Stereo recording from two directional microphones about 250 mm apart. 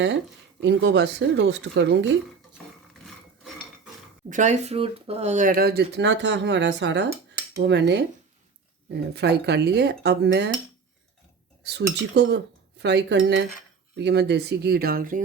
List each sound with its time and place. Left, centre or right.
0.6 s speech: right
4.3 s speech: right
11.6 s dishes: right
12.1 s speech: right